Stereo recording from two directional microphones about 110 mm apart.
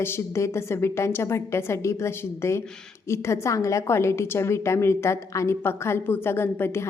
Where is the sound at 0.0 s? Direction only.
25° left (ahead or behind).